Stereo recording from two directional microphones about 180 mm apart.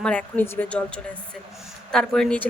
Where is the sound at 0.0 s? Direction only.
5° left (ahead or behind).